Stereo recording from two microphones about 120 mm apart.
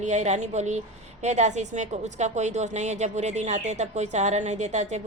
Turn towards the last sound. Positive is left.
turn(degrees=-70)  # may be behind; listen again after turning